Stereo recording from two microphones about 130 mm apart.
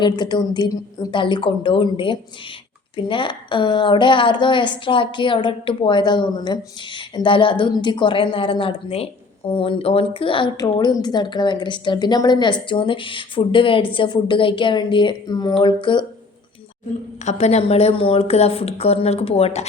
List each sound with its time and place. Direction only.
0.0 s a woman's voice: 35° left (ahead or behind)
17.2 s a woman's voice: 60° left (ahead or behind)